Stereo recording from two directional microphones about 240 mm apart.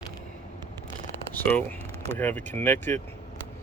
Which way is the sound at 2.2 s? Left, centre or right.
Centre.